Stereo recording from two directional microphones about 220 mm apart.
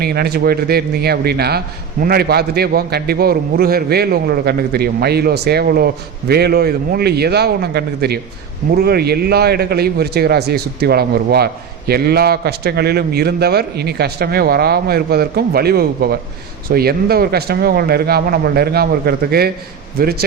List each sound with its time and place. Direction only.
0.0 s a man's voice: 45° right (ahead or behind)